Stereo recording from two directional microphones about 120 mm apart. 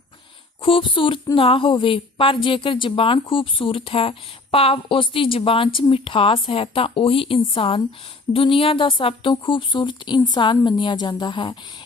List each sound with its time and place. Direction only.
0.6 s a woman's voice: 45° left (ahead or behind)